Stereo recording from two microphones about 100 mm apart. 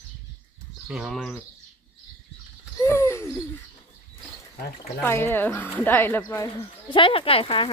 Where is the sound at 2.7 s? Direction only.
25° left (ahead or behind).